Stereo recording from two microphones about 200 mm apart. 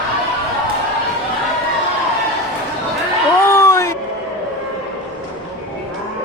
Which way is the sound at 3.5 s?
15° left (ahead or behind).